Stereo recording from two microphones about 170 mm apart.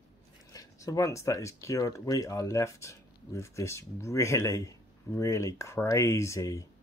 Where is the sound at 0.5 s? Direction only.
20° left (ahead or behind).